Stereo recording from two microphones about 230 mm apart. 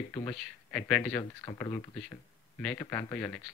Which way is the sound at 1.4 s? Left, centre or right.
Centre.